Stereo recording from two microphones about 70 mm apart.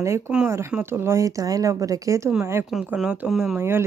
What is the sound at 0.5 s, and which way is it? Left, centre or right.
Speech, right.